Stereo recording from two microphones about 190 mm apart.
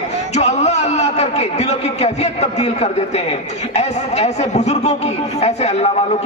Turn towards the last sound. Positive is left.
turn(degrees=35)  # may be behind; listen again after turning